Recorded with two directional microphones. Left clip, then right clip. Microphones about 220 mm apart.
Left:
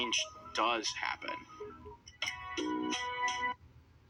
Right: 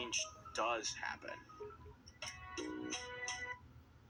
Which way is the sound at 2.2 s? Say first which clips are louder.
Left 9 dB; 35° left (ahead or behind).